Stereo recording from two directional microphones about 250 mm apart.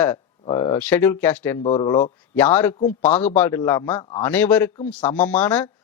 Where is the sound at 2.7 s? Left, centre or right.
Left.